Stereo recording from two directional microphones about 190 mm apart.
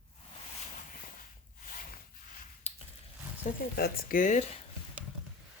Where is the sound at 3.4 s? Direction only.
40° left (ahead or behind).